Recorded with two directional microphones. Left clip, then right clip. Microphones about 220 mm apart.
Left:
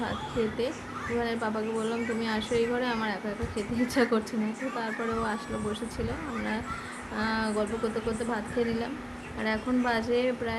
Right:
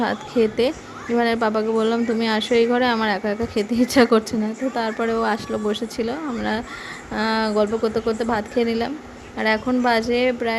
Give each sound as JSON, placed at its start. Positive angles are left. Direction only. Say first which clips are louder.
{"t": 0.0, "sound": "a woman's voice", "louder": "right 10 dB", "side_deg": -40}